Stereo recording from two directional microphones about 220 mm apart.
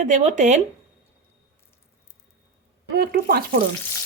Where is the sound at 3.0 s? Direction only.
45° right (ahead or behind).